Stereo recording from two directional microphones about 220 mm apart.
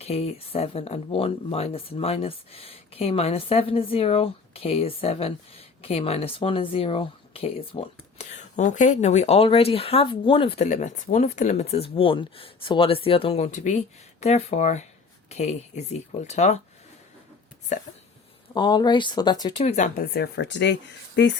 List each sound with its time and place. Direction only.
0.0 s speech: 30° left (ahead or behind)
18.5 s speech: 20° left (ahead or behind)
19.6 s speech: 30° left (ahead or behind); by 20.7 s 55° left (ahead or behind)